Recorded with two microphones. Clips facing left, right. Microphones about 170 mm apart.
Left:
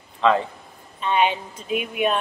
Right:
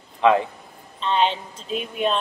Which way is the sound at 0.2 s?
15° right (ahead or behind).